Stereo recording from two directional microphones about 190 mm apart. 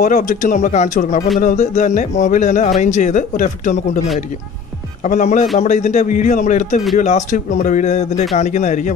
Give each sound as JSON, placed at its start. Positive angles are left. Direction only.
{"t": 0.0, "sound": "speech", "side_deg": 45}
{"t": 5.0, "sound": "speech", "side_deg": 40}